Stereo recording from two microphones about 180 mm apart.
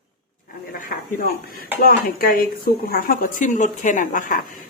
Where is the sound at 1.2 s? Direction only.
55° left (ahead or behind).